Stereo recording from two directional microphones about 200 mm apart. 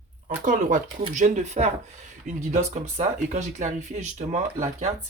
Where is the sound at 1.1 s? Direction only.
35° right (ahead or behind).